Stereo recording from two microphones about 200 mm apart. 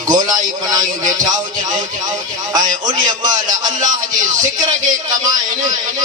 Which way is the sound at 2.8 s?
20° right (ahead or behind).